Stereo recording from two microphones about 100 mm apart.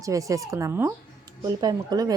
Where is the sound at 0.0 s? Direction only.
35° right (ahead or behind).